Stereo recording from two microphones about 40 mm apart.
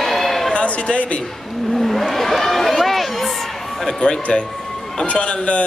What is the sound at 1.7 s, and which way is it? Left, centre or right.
Speech, centre.